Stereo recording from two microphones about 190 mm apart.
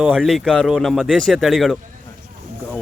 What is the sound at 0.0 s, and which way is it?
Speech, centre (ahead or behind).